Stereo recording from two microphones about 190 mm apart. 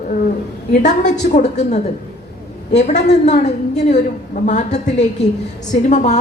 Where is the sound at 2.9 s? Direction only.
35° left (ahead or behind).